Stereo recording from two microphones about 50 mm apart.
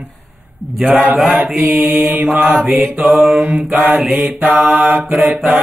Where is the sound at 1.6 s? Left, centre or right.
Right.